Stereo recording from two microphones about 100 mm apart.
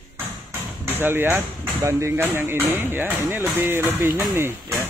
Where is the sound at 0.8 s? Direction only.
20° right (ahead or behind).